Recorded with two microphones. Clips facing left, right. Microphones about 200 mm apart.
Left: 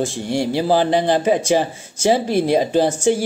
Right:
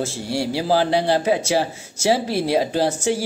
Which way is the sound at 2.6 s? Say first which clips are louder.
Left 3 dB; 15° left (ahead or behind).